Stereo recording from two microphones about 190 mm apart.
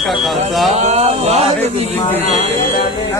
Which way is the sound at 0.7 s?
35° right (ahead or behind).